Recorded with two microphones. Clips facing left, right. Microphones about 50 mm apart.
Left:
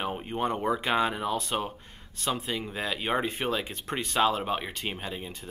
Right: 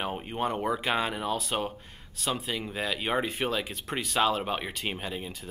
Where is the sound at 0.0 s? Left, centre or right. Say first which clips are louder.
Left 1 dB; centre.